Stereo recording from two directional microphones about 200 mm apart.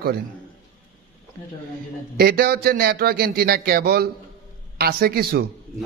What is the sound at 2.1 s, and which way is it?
A man's voice, 50° right (ahead or behind).